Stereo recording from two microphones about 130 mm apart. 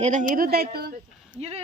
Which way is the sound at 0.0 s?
85° right.